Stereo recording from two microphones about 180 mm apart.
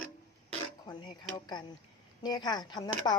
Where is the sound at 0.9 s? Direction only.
25° left (ahead or behind).